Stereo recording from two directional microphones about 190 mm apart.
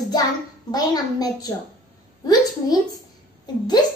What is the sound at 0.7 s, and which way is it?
A woman's voice, 20° left (ahead or behind).